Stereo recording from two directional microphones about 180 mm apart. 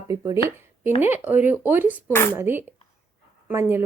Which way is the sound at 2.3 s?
10° right (ahead or behind).